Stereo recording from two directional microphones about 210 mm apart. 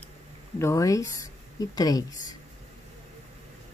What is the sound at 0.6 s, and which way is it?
Speech, 15° left (ahead or behind).